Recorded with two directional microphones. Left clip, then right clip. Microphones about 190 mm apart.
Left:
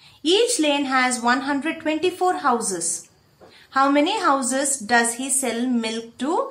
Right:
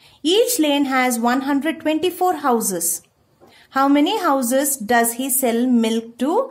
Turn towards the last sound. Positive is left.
turn(degrees=-45)  # may be behind; listen again after turning